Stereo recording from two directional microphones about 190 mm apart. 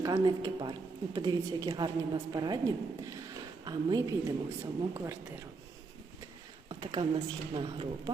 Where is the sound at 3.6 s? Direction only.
20° right (ahead or behind).